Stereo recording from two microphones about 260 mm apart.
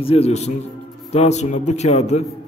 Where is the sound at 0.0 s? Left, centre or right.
Left.